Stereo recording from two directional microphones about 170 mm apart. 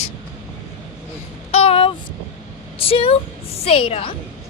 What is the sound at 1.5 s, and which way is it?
Speech, 35° left (ahead or behind).